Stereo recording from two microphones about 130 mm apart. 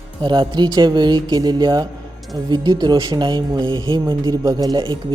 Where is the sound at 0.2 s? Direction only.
35° right (ahead or behind).